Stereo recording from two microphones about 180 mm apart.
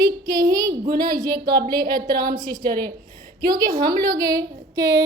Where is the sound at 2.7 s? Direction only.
55° right (ahead or behind).